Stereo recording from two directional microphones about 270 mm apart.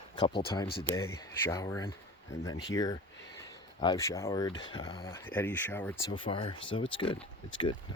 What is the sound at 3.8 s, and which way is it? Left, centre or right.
Speech, centre.